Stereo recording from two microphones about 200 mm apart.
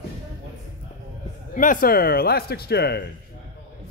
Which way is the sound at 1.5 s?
40° left (ahead or behind).